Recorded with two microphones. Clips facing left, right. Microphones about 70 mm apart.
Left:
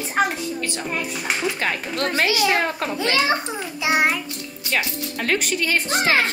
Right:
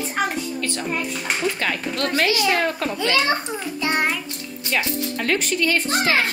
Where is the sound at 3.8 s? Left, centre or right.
Centre.